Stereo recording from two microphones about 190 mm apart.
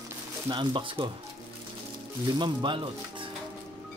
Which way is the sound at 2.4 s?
25° right (ahead or behind).